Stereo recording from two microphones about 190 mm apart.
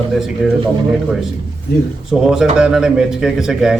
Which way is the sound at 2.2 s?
5° right (ahead or behind).